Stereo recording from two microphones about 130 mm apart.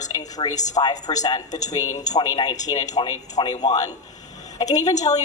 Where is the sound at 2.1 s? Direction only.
30° left (ahead or behind).